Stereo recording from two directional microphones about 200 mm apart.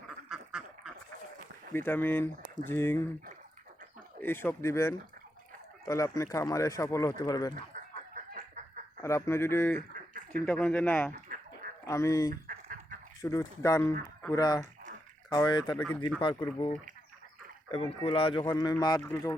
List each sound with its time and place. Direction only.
0.3 s duck: 5° right (ahead or behind)
1.7 s speech: 10° left (ahead or behind)
4.2 s speech: 10° left (ahead or behind)
7.5 s a sound: 40° right (ahead or behind)
9.0 s speech: 15° left (ahead or behind)
11.1 s a sound: 45° right (ahead or behind)
11.9 s speech: 15° left (ahead or behind)
12.3 s fowl: 45° right (ahead or behind)
13.2 s speech: 15° left (ahead or behind)